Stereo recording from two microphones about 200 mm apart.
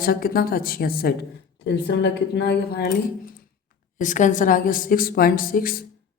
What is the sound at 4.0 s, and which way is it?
Speech, 40° left (ahead or behind).